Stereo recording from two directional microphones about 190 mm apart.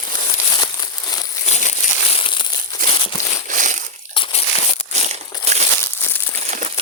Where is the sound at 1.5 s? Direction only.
40° left (ahead or behind).